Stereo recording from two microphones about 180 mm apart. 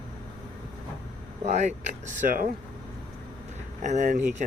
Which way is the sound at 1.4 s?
40° right (ahead or behind).